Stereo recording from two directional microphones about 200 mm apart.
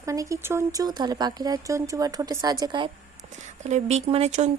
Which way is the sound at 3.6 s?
35° right (ahead or behind).